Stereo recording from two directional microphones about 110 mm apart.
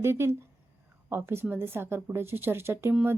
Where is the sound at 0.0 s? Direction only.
25° right (ahead or behind).